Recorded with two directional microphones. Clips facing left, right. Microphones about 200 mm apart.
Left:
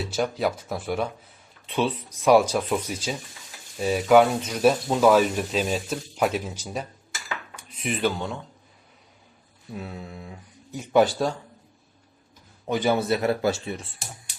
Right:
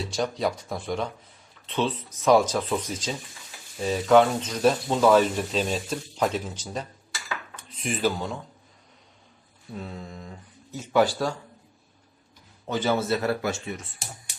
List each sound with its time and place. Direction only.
0.0 s speech: 5° left (ahead or behind)
7.5 s cutlery: 10° left (ahead or behind)
8.0 s speech: centre (ahead or behind)
9.7 s speech: 5° left (ahead or behind)
12.6 s speech: 15° left (ahead or behind)
13.4 s speech: 30° left (ahead or behind)